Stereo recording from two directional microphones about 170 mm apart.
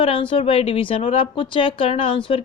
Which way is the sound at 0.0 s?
30° left (ahead or behind).